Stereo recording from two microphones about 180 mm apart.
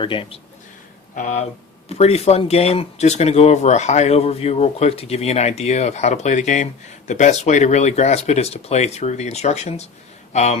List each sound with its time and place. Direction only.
0.0 s speech: 30° left (ahead or behind)
1.1 s speech: 45° left (ahead or behind)